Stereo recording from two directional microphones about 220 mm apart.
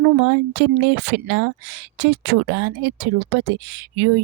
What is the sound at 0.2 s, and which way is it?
Speech, 55° right (ahead or behind).